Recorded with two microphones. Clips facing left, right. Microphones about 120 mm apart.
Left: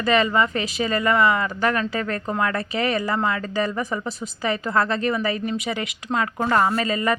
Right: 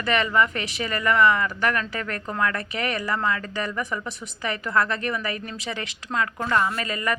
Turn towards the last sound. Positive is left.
turn(degrees=25)  # may be behind; listen again after turning